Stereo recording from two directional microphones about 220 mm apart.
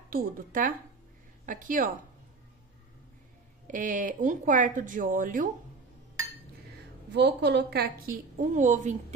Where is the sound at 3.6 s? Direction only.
35° right (ahead or behind).